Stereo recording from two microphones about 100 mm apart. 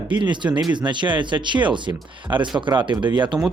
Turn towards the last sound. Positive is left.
turn(degrees=-50)  # may be behind; listen again after turning